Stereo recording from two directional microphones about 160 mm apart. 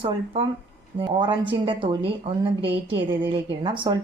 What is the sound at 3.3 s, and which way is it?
Speech, 30° right (ahead or behind).